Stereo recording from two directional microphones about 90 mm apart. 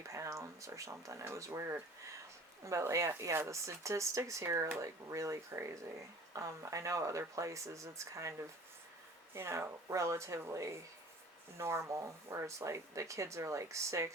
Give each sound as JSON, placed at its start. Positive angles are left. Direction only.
{"t": 0.1, "sound": "speech", "side_deg": -35}